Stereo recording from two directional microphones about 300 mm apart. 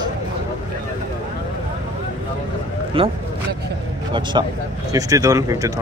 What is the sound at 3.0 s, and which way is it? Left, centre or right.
Speech, centre.